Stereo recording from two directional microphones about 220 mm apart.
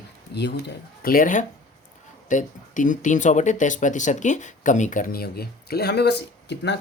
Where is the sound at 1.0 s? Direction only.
40° left (ahead or behind).